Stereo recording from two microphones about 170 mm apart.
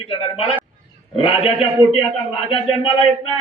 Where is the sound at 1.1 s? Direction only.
35° left (ahead or behind).